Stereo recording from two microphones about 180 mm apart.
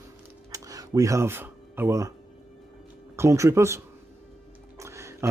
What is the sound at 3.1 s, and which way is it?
Speech, 15° right (ahead or behind).